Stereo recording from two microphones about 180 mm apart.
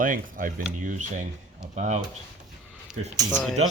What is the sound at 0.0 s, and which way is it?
Speech, 50° right (ahead or behind).